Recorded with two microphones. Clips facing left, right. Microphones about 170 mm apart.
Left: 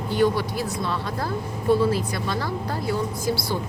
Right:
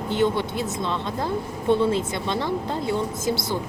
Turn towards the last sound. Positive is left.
turn(degrees=-20)  # may be behind; listen again after turning